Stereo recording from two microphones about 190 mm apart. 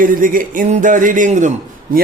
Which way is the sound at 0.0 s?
45° right (ahead or behind).